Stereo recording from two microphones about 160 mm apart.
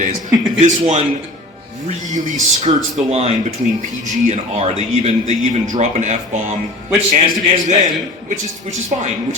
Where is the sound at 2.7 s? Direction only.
35° right (ahead or behind).